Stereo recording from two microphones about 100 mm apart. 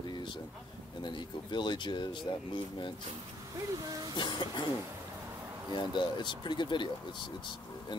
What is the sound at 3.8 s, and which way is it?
Speech, 40° right (ahead or behind).